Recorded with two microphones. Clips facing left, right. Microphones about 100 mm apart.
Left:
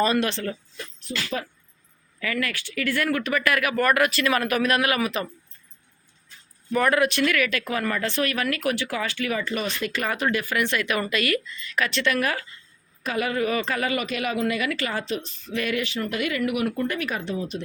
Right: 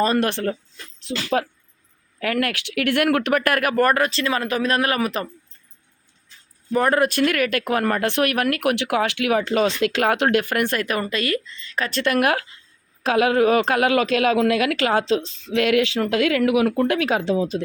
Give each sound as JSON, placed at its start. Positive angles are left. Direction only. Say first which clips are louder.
{"t": 0.0, "sound": "speech", "louder": "right 3 dB", "side_deg": -45}
{"t": 1.1, "sound": "a woman's voice", "louder": "right 4 dB", "side_deg": -90}
{"t": 2.1, "sound": "speech", "louder": "right 5 dB", "side_deg": -60}
{"t": 3.9, "sound": "speech", "louder": "even", "side_deg": -30}
{"t": 6.7, "sound": "speech", "louder": "right 2 dB", "side_deg": -35}
{"t": 10.6, "sound": "speech", "louder": "right 2 dB", "side_deg": -45}
{"t": 11.9, "sound": "speech", "louder": "right 7 dB", "side_deg": -45}
{"t": 13.0, "sound": "a woman's voice", "louder": "right 8 dB", "side_deg": -90}